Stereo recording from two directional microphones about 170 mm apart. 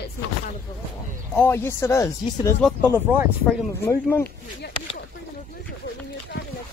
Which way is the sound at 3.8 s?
15° left (ahead or behind).